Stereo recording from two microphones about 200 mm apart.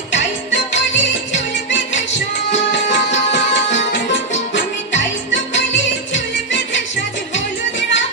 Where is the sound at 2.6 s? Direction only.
65° left (ahead or behind).